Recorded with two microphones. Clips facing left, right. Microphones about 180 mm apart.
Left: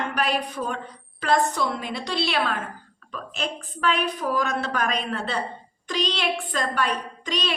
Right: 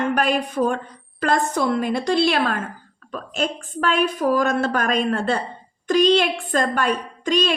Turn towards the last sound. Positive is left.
turn(degrees=-50)  # may be behind; listen again after turning